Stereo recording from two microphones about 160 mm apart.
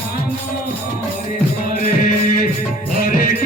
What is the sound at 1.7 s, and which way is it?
Music, 60° left (ahead or behind).